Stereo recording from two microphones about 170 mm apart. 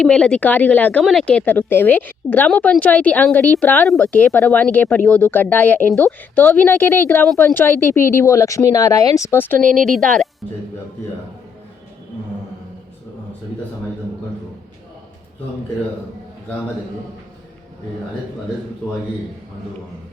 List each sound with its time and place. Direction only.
0.0 s speech: 5° left (ahead or behind)
9.6 s speech: 50° right (ahead or behind)
9.8 s speech: 5° left (ahead or behind)